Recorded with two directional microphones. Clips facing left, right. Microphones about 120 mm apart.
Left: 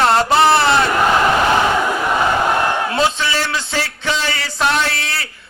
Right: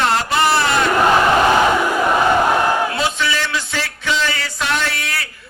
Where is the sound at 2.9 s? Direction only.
30° left (ahead or behind).